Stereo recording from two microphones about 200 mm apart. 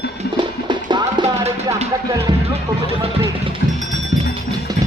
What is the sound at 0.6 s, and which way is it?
Music, 20° right (ahead or behind).